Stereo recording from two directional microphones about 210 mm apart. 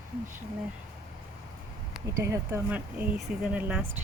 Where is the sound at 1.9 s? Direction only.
10° right (ahead or behind).